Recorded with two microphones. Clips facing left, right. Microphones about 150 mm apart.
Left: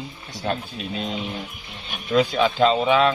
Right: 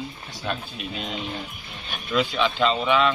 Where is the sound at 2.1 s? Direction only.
40° left (ahead or behind).